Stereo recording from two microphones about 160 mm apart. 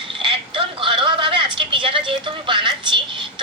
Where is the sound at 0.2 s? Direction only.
30° right (ahead or behind).